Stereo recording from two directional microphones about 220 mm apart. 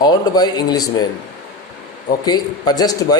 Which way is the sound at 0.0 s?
20° left (ahead or behind).